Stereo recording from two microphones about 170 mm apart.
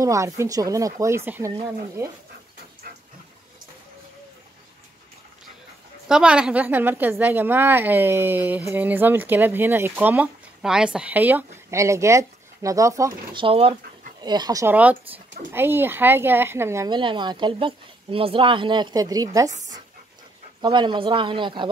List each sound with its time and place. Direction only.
0.0 s a woman's voice: 20° right (ahead or behind)
6.0 s a woman's voice: 5° right (ahead or behind)
13.4 s a woman's voice: 30° right (ahead or behind); by 16.9 s 15° right (ahead or behind)
16.9 s speech: 30° right (ahead or behind)
20.6 s speech: 25° right (ahead or behind)